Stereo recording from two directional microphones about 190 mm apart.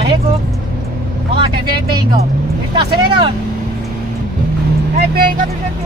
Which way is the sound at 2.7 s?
25° right (ahead or behind).